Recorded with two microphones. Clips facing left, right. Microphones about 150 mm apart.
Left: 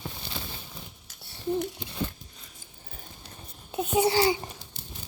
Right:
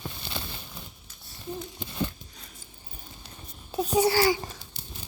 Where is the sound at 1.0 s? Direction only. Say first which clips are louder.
Left 9 dB; 80° left.